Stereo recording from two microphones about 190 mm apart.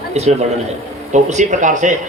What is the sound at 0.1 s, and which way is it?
A man's voice, 35° right (ahead or behind).